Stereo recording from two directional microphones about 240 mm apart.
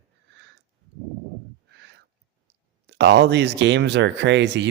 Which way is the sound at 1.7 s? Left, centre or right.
Right.